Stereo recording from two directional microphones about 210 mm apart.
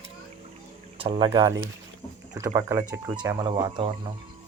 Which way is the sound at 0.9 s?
25° right (ahead or behind).